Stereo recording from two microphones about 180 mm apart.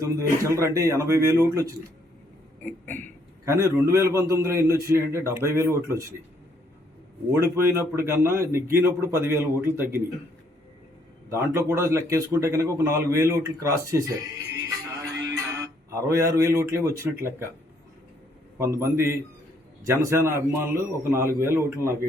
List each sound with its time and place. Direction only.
0.0 s a man's voice: 15° right (ahead or behind)
2.6 s a sound: 10° left (ahead or behind)
3.4 s a man's voice: 15° right (ahead or behind)
7.3 s a man's voice: 15° right (ahead or behind)
11.3 s a man's voice: 15° right (ahead or behind)
15.4 s speech: 15° right (ahead or behind)
18.6 s a man's voice: 15° right (ahead or behind)